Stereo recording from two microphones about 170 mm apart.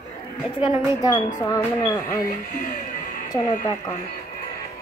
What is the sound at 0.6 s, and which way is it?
Speech, 20° left (ahead or behind).